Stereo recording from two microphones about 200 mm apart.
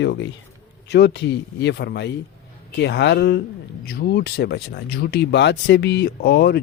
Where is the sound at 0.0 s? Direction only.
65° left (ahead or behind).